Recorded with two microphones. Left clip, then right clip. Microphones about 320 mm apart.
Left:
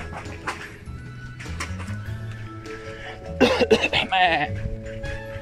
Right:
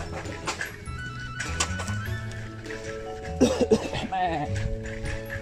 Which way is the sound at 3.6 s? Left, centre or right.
Left.